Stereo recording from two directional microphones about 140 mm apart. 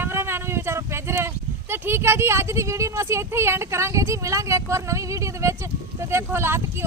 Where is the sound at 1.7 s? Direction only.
15° right (ahead or behind).